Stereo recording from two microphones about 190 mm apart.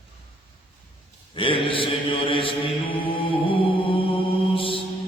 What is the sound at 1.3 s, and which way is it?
Mantra, 25° left (ahead or behind).